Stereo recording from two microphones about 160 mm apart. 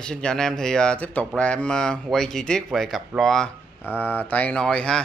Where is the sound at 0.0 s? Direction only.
5° left (ahead or behind).